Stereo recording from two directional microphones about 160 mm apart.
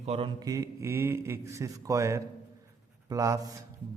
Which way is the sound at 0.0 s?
40° right (ahead or behind).